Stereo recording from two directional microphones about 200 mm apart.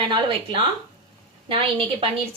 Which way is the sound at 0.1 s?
25° right (ahead or behind).